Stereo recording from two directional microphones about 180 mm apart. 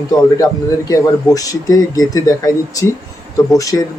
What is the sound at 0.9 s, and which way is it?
A man's voice, 20° left (ahead or behind).